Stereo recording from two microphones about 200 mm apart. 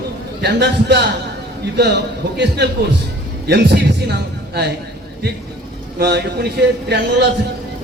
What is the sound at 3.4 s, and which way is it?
A man's voice, 55° right (ahead or behind).